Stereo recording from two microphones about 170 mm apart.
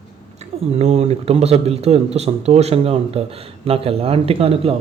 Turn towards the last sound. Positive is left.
turn(degrees=-35)  # may be behind; listen again after turning